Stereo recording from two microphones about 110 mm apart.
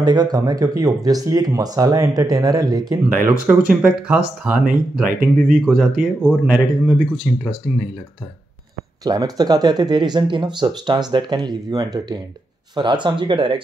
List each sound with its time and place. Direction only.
0.0 s speech: 35° right (ahead or behind)
3.3 s speech: 10° right (ahead or behind)
5.5 s speech: 5° right (ahead or behind)
7.3 s speech: centre (ahead or behind)
9.0 s speech: 35° right (ahead or behind)